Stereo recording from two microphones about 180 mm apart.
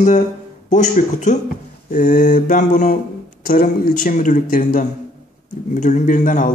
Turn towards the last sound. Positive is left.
turn(degrees=45)  # may be behind; listen again after turning